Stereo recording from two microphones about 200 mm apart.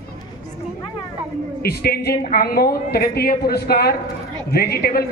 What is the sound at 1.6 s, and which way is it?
A woman's voice, 50° left (ahead or behind).